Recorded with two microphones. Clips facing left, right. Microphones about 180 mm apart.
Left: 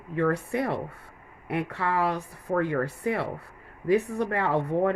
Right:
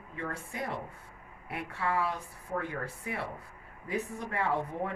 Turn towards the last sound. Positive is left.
turn(degrees=70)  # may be behind; listen again after turning